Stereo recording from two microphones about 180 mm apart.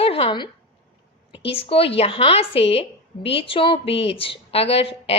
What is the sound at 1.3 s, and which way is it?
A woman's voice, 30° left (ahead or behind).